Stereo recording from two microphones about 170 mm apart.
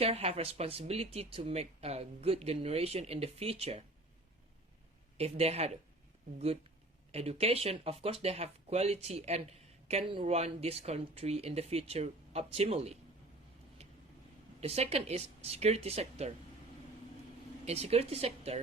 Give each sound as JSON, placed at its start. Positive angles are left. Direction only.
{"t": 0.0, "sound": "speech", "side_deg": -35}
{"t": 5.1, "sound": "speech", "side_deg": -35}
{"t": 7.1, "sound": "speech", "side_deg": -35}
{"t": 14.6, "sound": "speech", "side_deg": -35}
{"t": 17.7, "sound": "speech", "side_deg": -40}